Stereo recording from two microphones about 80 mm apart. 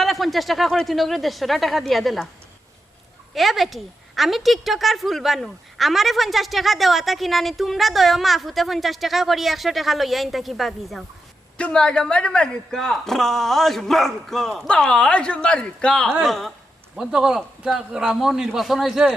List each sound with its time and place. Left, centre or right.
0.0 s a woman's voice: centre
3.3 s a woman's voice: centre
11.5 s a man's voice: centre